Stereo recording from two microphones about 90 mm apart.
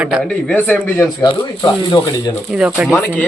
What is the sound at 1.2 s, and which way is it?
Speech, 55° left (ahead or behind).